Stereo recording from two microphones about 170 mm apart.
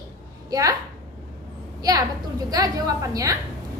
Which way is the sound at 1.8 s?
20° right (ahead or behind).